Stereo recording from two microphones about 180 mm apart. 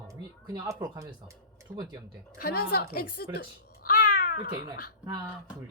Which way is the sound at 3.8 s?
50° left (ahead or behind).